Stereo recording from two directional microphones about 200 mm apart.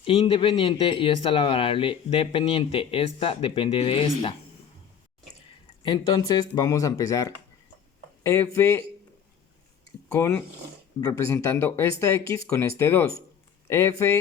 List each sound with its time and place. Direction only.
0.0 s speech: 30° left (ahead or behind)
5.8 s speech: 20° left (ahead or behind)
10.1 s speech: 15° left (ahead or behind)